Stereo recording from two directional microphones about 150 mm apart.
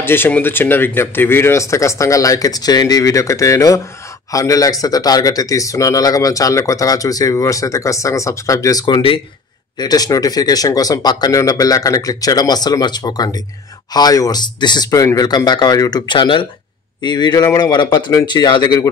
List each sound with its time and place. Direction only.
0.0 s speech: 15° left (ahead or behind)